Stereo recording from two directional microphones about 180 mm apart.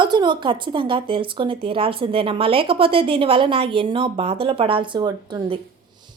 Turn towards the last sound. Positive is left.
turn(degrees=-25)  # may be behind; listen again after turning